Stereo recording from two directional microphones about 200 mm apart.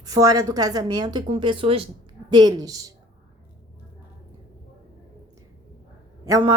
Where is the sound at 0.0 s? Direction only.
15° right (ahead or behind).